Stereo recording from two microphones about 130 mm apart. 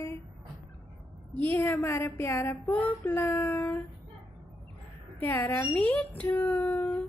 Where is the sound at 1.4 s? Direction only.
15° left (ahead or behind).